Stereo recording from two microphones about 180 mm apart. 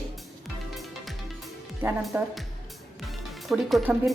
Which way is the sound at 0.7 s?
Centre (ahead or behind).